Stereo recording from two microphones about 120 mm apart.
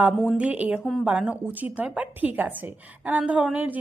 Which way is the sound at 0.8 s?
5° left (ahead or behind).